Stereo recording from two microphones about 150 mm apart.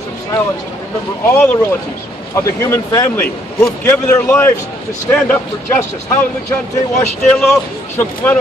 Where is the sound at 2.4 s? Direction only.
20° left (ahead or behind).